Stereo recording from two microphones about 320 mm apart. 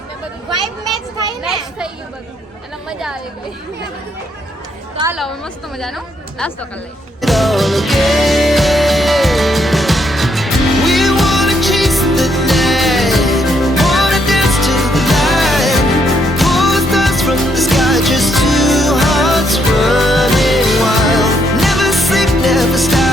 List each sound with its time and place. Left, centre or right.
4.9 s a woman's voice: centre
7.2 s music: centre